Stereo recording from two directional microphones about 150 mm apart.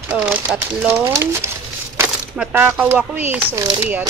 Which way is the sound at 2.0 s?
15° right (ahead or behind).